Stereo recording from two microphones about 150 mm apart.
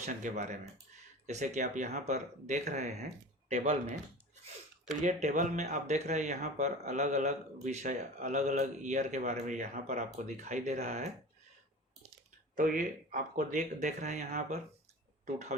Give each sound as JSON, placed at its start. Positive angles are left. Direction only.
{"t": 0.0, "sound": "speech", "side_deg": -55}
{"t": 5.0, "sound": "speech", "side_deg": -55}
{"t": 12.5, "sound": "speech", "side_deg": -65}